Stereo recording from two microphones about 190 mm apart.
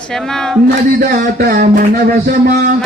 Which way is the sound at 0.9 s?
55° right (ahead or behind).